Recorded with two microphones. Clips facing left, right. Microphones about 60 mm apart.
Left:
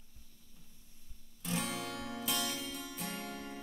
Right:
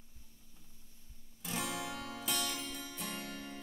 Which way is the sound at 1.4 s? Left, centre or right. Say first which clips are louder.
Left 2 dB; centre.